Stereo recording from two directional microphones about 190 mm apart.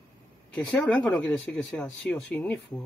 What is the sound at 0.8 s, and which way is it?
Speech, 5° left (ahead or behind).